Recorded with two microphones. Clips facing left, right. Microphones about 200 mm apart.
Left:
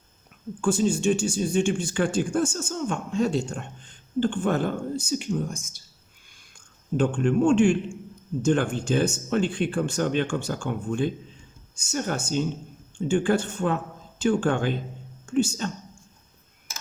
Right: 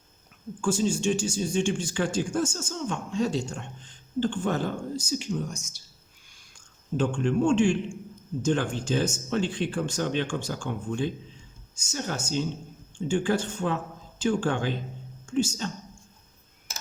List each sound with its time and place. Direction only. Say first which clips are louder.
0.6 s speech: left 3 dB; 60° left (ahead or behind)
6.9 s speech: left 3 dB; 55° left (ahead or behind)